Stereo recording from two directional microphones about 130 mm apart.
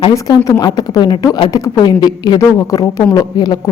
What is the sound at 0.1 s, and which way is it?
Speech, 25° left (ahead or behind).